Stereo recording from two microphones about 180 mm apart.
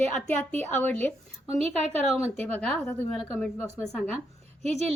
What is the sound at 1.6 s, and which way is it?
Speech, 35° right (ahead or behind).